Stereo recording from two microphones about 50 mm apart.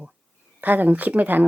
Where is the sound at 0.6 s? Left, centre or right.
Right.